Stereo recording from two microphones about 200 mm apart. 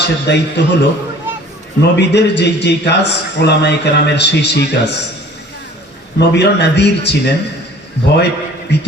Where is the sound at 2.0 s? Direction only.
60° left (ahead or behind).